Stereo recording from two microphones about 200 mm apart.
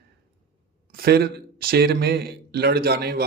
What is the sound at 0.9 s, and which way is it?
Speech, 50° right (ahead or behind).